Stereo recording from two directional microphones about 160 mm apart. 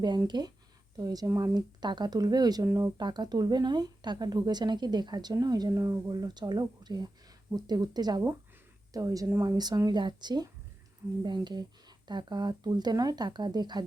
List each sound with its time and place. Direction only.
0.0 s speech: 25° right (ahead or behind)